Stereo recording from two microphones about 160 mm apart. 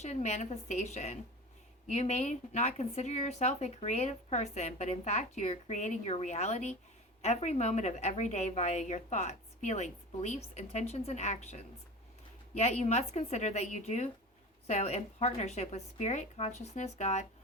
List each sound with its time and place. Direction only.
0.0 s a woman's voice: 45° left (ahead or behind)